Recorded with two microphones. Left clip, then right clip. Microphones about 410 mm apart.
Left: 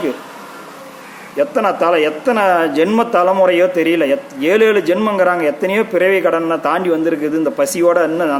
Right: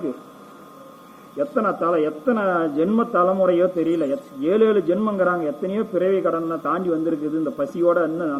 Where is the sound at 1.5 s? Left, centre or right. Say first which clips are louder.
Left 6 dB; left.